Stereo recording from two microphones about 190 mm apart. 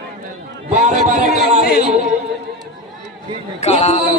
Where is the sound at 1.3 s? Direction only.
55° left (ahead or behind).